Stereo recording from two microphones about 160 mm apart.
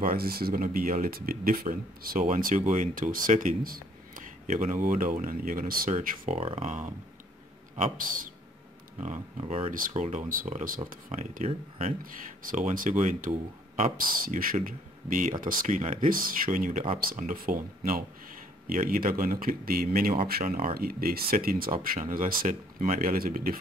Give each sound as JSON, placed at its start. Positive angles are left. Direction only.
{"t": 0.0, "sound": "speech", "side_deg": -70}
{"t": 9.4, "sound": "speech", "side_deg": -35}
{"t": 9.7, "sound": "speech", "side_deg": -50}
{"t": 12.0, "sound": "speech", "side_deg": -60}